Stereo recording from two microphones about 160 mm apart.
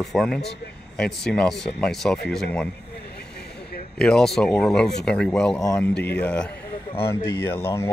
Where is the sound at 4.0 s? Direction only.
5° left (ahead or behind).